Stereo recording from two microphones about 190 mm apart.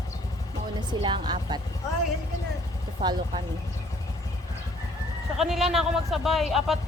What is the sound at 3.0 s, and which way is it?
Speech, 25° right (ahead or behind).